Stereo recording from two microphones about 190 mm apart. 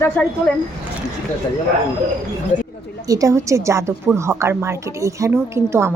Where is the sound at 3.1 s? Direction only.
15° right (ahead or behind).